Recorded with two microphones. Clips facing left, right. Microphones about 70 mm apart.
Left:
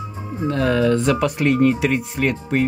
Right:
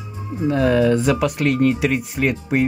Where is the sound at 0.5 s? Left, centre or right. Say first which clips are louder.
Right 2 dB; centre.